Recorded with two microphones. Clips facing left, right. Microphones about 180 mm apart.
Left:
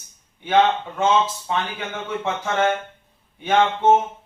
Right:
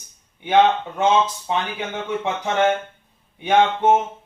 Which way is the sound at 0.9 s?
15° right (ahead or behind).